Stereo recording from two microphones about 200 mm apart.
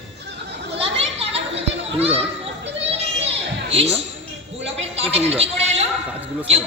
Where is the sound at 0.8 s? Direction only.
30° right (ahead or behind).